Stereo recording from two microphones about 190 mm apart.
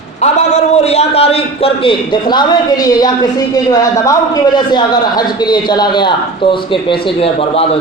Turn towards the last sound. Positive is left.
turn(degrees=30)  # may be behind; listen again after turning